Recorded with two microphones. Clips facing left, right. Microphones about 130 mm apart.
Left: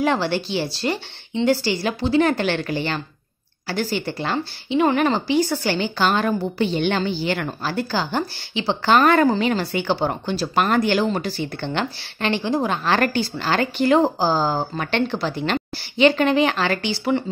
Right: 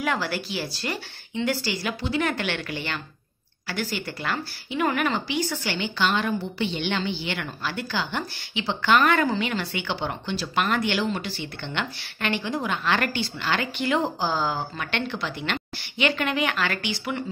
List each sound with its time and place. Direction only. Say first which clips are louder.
0.0 s a woman's voice: left 6 dB; 30° left (ahead or behind)